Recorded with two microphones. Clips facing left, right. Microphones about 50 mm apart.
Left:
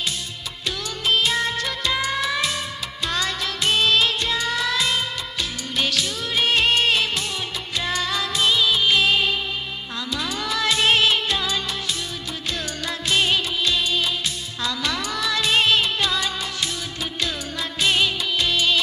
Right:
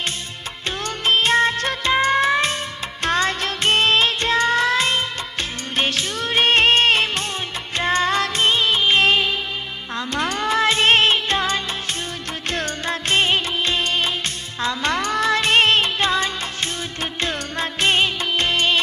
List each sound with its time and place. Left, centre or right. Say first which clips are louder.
0.6 s music: right 3 dB; right